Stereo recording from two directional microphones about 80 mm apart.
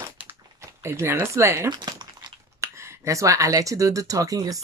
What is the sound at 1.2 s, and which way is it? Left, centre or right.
Speech, right.